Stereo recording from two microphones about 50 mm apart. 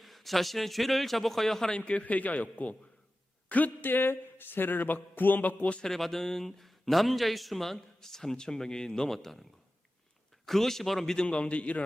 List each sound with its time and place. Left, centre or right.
0.0 s a man's voice: centre
1.7 s a man's voice: left
5.8 s a man's voice: centre
11.3 s a man's voice: left